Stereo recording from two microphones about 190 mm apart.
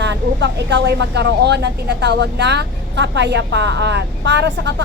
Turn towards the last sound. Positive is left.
turn(degrees=-70)  # may be behind; listen again after turning